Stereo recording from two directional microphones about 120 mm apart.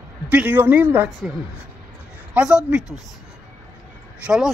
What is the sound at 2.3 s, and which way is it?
Speech, 5° right (ahead or behind).